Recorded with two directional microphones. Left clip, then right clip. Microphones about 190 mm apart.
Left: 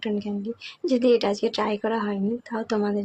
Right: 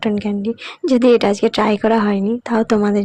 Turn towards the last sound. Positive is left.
turn(degrees=-50)  # may be behind; listen again after turning